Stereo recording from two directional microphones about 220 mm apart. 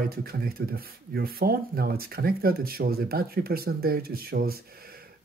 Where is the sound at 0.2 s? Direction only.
45° right (ahead or behind).